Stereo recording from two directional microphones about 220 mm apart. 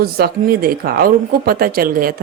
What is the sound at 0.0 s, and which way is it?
A woman's voice, 45° right (ahead or behind).